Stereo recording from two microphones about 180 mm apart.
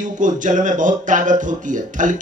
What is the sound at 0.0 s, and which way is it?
Speech, 45° right (ahead or behind).